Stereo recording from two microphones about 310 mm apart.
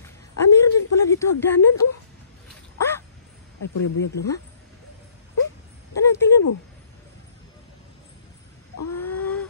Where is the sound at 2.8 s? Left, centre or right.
Centre.